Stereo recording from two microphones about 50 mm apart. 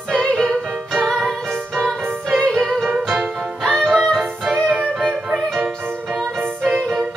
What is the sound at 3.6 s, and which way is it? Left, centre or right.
Music, centre.